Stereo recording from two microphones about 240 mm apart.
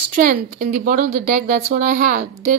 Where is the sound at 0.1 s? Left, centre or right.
Right.